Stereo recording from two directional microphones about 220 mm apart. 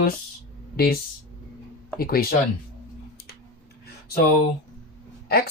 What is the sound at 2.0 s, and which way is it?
Speech, 45° left (ahead or behind).